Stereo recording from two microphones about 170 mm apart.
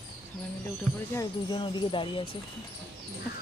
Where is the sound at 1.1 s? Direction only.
25° left (ahead or behind).